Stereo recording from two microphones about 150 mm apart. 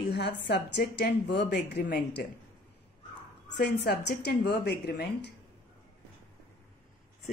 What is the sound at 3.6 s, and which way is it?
A woman's voice, 90° left.